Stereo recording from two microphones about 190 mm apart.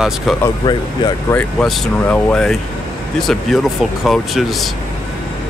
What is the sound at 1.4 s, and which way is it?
Speech, 5° left (ahead or behind).